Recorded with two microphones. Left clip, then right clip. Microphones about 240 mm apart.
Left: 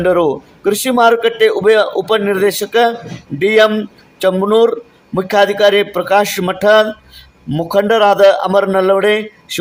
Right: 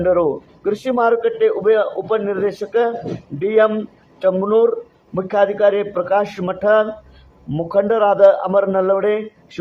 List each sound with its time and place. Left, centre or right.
0.0 s a man's voice: left